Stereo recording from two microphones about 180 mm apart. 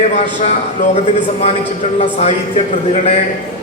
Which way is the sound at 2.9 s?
40° left (ahead or behind).